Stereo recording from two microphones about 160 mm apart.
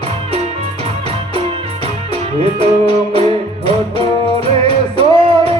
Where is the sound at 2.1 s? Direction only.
40° right (ahead or behind).